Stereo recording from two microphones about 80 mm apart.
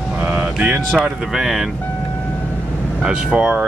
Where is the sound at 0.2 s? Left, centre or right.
Right.